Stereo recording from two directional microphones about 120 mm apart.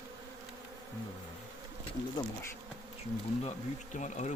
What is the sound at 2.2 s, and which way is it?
Insect, 35° left (ahead or behind).